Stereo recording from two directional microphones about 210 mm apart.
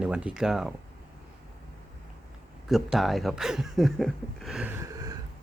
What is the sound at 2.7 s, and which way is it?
Speech, centre (ahead or behind).